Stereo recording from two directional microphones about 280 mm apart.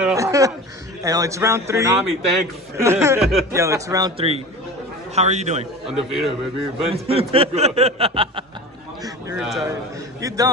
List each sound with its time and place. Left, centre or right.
0.0 s chuckle: centre
1.0 s a man's voice: centre
5.9 s a man's voice: centre
6.9 s speech: right
9.0 s a sound: centre
10.2 s a man's voice: centre